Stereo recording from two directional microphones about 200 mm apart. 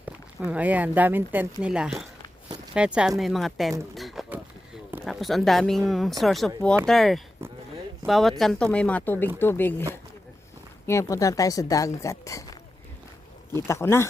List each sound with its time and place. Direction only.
0.0 s speech: 5° right (ahead or behind)
3.9 s a sound: centre (ahead or behind)
5.0 s speech: centre (ahead or behind)
10.8 s speech: 15° left (ahead or behind)
13.7 s speech: 15° left (ahead or behind)